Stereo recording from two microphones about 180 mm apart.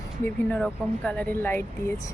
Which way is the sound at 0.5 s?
5° left (ahead or behind).